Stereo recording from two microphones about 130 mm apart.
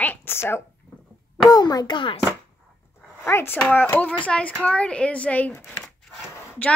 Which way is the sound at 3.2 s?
15° left (ahead or behind).